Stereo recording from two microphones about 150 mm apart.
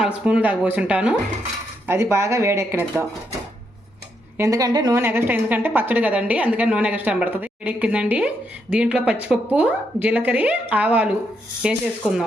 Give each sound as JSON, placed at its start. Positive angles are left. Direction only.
{"t": 0.0, "sound": "a woman's voice", "side_deg": -5}
{"t": 1.9, "sound": "a woman's voice", "side_deg": -20}
{"t": 4.4, "sound": "a woman's voice", "side_deg": -20}
{"t": 4.9, "sound": "a woman's voice", "side_deg": -15}